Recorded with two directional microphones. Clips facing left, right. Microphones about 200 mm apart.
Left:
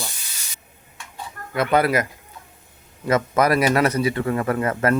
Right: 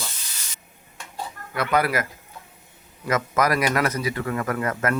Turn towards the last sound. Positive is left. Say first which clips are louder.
# left 4 dB
turn(degrees=25)  # may be behind; listen again after turning